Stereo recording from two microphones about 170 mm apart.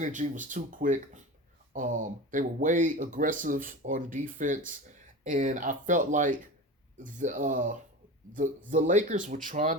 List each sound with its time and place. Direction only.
0.0 s speech: 50° right (ahead or behind)